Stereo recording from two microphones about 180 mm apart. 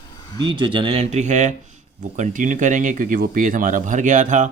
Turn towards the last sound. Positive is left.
turn(degrees=-45)  # may be behind; listen again after turning